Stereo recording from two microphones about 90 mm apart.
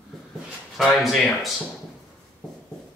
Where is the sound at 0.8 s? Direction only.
Centre (ahead or behind).